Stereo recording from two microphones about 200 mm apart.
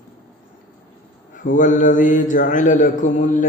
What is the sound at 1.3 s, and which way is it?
A man's voice, 40° left (ahead or behind).